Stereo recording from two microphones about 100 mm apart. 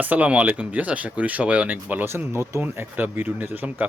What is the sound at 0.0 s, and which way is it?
Speech, 15° right (ahead or behind).